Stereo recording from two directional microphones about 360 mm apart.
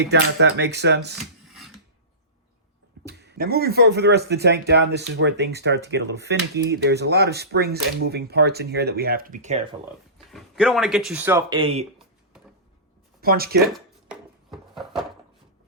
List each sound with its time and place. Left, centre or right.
0.0 s speech: right
1.2 s a sound: centre
3.0 s speech: right
10.3 s speech: centre
13.2 s speech: right
13.7 s a sound: centre